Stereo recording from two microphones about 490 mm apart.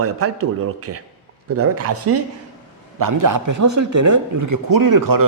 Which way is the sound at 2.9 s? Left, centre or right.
Right.